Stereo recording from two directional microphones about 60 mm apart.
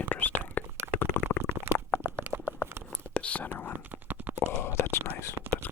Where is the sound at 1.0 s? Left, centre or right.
Left.